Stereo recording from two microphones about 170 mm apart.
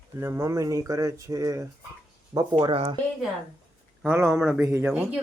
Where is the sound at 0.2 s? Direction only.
15° right (ahead or behind).